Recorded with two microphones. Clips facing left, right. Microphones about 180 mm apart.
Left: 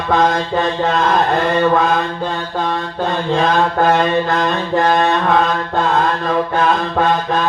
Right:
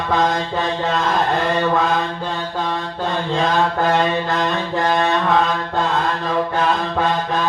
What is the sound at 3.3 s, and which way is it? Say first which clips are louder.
Mantra: left 3 dB; 55° left (ahead or behind).